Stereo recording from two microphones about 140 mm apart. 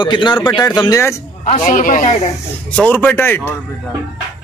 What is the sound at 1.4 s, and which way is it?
Speech, 55° left (ahead or behind).